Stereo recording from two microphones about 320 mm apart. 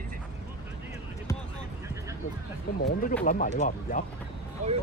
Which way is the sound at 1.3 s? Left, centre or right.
Centre.